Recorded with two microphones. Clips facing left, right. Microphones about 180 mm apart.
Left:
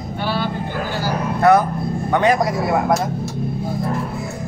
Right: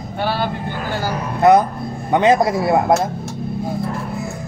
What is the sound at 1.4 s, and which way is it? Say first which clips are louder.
A man's voice: right 2 dB; 20° right (ahead or behind).